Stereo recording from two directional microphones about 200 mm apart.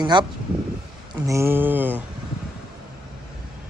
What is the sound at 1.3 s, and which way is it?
Speech, 10° right (ahead or behind).